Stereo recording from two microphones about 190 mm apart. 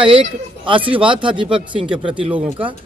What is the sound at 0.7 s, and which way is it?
Speech, 25° right (ahead or behind).